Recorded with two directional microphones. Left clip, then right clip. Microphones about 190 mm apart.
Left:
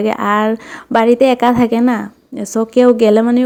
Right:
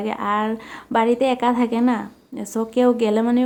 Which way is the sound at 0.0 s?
30° left (ahead or behind).